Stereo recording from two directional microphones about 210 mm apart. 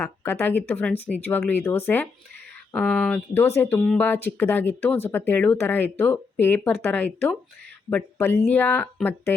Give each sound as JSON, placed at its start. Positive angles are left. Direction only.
{"t": 0.0, "sound": "speech", "side_deg": 10}